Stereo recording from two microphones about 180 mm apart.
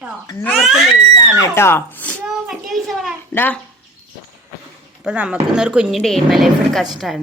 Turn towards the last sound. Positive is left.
turn(degrees=0)  # may be behind; listen again after turning